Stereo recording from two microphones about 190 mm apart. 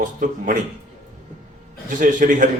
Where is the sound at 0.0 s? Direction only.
45° right (ahead or behind).